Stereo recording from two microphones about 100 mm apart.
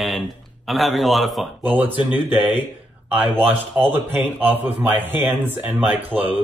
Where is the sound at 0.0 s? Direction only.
Centre (ahead or behind).